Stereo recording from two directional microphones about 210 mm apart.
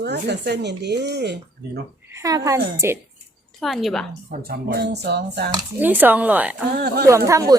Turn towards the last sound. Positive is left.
turn(degrees=-15)  # may be behind; listen again after turning